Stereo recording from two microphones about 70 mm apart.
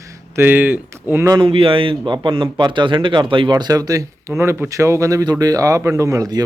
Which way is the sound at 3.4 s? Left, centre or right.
Right.